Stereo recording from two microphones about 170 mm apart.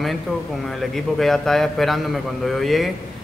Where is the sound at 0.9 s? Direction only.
Centre (ahead or behind).